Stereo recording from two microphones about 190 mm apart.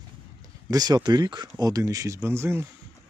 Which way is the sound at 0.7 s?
20° right (ahead or behind).